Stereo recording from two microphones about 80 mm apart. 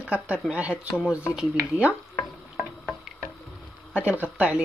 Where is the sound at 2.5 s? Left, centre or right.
Centre.